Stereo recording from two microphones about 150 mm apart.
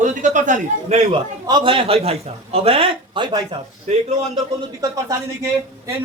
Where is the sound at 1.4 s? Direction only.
30° right (ahead or behind).